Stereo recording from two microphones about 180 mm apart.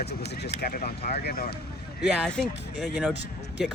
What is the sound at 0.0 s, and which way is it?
Speech, 65° left (ahead or behind).